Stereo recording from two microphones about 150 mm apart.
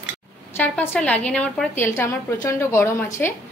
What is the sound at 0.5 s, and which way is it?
A woman's voice, 10° left (ahead or behind).